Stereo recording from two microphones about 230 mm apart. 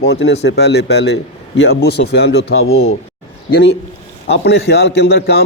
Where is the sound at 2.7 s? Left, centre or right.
Left.